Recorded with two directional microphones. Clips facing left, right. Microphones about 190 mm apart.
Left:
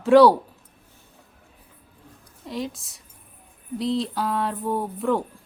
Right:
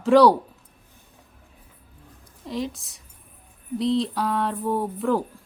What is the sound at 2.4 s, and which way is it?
Speech, centre (ahead or behind).